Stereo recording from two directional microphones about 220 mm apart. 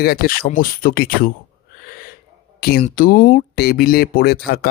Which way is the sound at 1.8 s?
45° left (ahead or behind).